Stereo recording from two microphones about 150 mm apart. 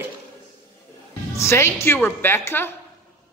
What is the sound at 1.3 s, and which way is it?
A woman's voice, 15° left (ahead or behind).